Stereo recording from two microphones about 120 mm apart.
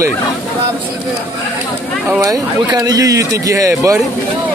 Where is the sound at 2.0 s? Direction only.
25° right (ahead or behind).